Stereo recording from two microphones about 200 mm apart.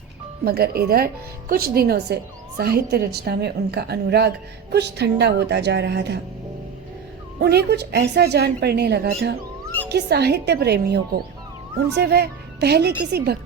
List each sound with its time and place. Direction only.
0.4 s a woman's voice: 50° right (ahead or behind)
7.3 s a woman's voice: 55° right (ahead or behind)